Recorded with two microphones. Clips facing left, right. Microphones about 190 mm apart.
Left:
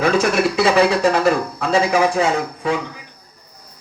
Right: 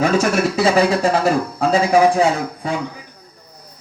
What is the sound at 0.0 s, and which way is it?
Speech, 40° right (ahead or behind).